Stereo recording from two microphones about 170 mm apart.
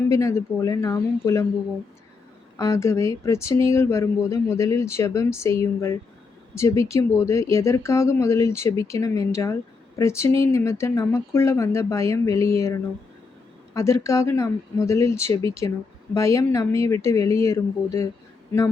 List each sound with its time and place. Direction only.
0.1 s speech: 20° left (ahead or behind)
2.6 s speech: 20° left (ahead or behind)
13.7 s speech: 15° left (ahead or behind)